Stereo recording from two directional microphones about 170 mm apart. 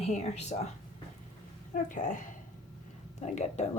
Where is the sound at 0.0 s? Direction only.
40° left (ahead or behind).